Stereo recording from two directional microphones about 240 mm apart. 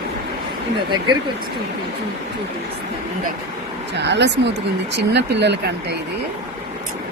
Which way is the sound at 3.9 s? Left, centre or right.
Right.